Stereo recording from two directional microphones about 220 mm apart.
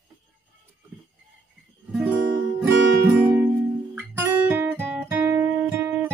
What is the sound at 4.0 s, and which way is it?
Guitar, 10° right (ahead or behind).